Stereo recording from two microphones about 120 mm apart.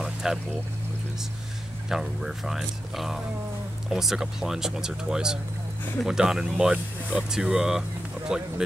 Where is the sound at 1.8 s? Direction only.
Centre (ahead or behind).